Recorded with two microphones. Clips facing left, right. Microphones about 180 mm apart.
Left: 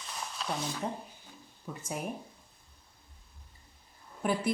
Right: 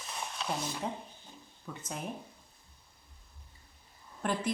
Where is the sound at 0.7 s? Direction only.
15° right (ahead or behind).